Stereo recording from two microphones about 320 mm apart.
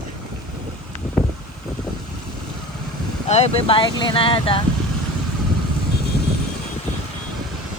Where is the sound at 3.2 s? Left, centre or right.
Centre.